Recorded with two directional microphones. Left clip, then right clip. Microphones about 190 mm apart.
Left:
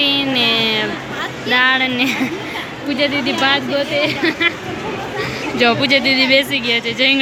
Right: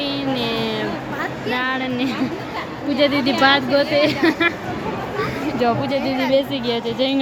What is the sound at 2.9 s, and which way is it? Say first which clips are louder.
A woman's voice: even; 25° right (ahead or behind).